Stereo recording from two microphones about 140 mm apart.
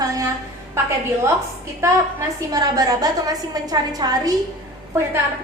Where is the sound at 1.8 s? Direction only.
25° right (ahead or behind).